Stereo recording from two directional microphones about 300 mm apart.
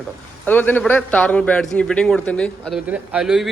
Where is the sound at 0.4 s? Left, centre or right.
Centre.